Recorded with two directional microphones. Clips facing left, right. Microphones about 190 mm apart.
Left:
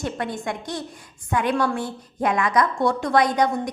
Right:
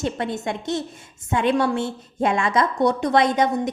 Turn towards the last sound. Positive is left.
turn(degrees=-25)  # may be behind; listen again after turning